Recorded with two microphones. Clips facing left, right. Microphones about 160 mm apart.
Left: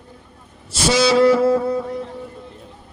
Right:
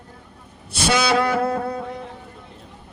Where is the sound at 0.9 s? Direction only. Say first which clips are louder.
Left 6 dB; 60° right (ahead or behind).